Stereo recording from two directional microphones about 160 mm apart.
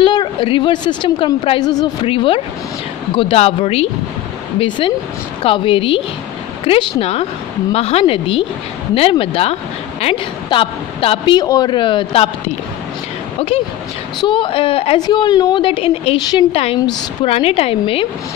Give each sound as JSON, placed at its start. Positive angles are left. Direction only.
{"t": 0.0, "sound": "a woman's voice", "side_deg": 30}
{"t": 14.2, "sound": "a woman's voice", "side_deg": 30}